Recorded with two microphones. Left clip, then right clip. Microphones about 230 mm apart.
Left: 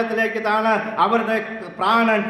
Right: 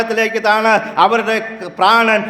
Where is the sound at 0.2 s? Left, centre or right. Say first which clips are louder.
Right 7 dB; right.